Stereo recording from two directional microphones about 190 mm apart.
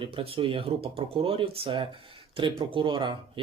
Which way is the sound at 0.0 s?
30° right (ahead or behind).